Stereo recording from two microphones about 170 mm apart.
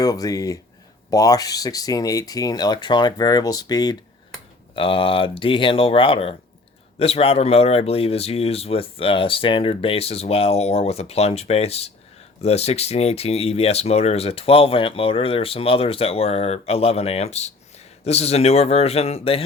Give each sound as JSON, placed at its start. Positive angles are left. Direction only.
{"t": 0.0, "sound": "speech", "side_deg": 20}